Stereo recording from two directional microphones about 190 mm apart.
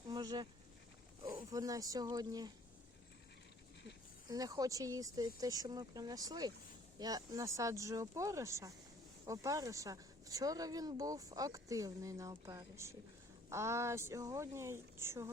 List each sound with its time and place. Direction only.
0.1 s a sound: 20° right (ahead or behind)
1.4 s speech: 20° right (ahead or behind)
4.3 s speech: 20° right (ahead or behind)